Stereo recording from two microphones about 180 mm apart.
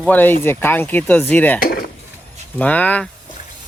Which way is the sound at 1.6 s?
60° left (ahead or behind).